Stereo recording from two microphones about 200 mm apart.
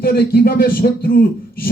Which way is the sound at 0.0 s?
50° left (ahead or behind).